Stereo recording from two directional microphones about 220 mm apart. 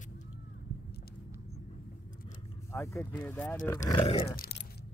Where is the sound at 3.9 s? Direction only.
25° left (ahead or behind).